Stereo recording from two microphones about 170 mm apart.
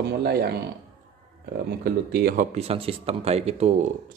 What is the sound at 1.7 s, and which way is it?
Speech, 70° right (ahead or behind).